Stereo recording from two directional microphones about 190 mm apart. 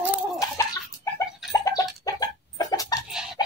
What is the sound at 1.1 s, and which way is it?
Chicken, 20° left (ahead or behind).